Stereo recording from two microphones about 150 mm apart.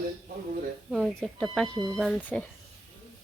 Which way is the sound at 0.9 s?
Centre (ahead or behind).